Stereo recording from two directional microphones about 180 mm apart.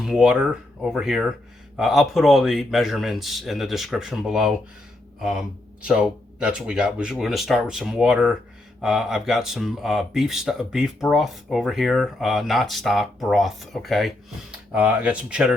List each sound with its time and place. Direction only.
0.0 s speech: 5° right (ahead or behind)